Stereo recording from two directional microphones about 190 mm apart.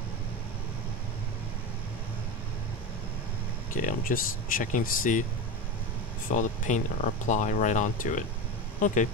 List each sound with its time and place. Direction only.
3.7 s speech: 45° left (ahead or behind)
6.3 s speech: 40° left (ahead or behind)